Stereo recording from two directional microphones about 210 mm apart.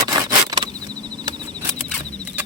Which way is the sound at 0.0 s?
15° right (ahead or behind).